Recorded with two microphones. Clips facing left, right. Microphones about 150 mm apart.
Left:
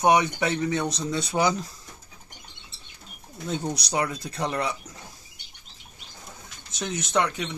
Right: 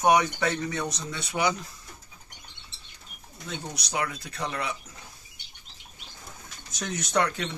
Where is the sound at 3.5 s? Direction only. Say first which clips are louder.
Left 5 dB; 35° left (ahead or behind).